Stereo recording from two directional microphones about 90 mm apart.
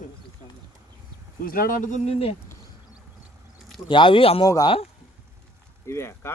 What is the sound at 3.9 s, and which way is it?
Speech, 70° left (ahead or behind).